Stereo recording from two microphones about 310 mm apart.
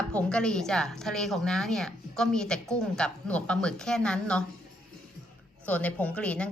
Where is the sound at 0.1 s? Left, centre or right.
Centre.